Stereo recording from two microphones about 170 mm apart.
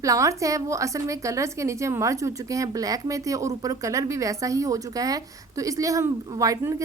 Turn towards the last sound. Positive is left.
turn(degrees=-20)  # may be behind; listen again after turning